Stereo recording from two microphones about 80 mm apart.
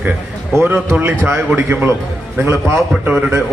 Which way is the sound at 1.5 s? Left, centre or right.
Right.